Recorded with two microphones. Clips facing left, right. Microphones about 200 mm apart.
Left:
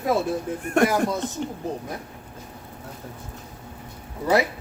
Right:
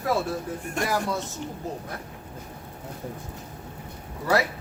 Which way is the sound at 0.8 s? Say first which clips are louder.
Left 7 dB; 60° left (ahead or behind).